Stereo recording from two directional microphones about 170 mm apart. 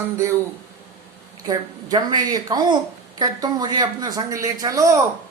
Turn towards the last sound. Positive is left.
turn(degrees=-20)  # may be behind; listen again after turning